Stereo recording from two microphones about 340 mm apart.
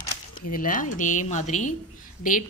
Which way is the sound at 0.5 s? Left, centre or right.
Left.